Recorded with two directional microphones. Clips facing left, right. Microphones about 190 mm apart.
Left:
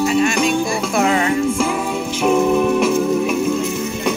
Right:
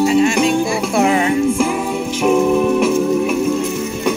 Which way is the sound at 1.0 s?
15° right (ahead or behind).